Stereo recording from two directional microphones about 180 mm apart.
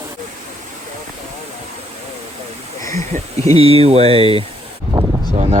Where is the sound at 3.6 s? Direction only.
35° right (ahead or behind).